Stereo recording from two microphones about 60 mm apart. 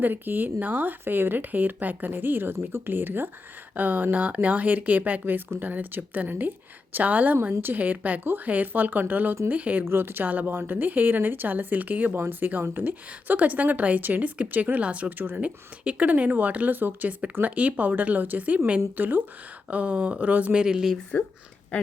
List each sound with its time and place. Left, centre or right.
0.0 s speech: right
9.9 s speech: right; by 20.9 s centre